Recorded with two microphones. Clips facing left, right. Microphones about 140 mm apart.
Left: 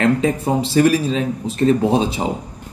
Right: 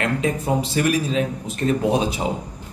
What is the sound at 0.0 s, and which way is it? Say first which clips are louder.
Speech: left 6 dB; 30° left (ahead or behind).